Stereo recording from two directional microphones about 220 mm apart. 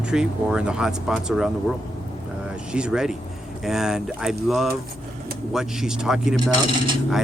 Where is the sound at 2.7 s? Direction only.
5° right (ahead or behind).